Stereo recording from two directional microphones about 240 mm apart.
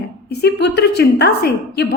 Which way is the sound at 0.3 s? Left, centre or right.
Left.